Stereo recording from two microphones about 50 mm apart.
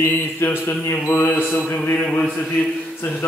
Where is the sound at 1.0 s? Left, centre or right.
Left.